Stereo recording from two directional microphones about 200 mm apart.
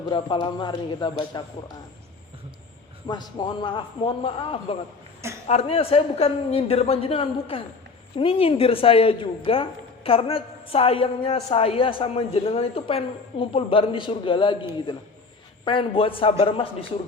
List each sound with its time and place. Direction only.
0.1 s speech: 25° left (ahead or behind)
3.1 s speech: 20° left (ahead or behind)